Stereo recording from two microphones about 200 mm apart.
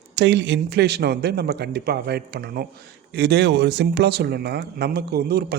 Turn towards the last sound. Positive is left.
turn(degrees=-50)  # may be behind; listen again after turning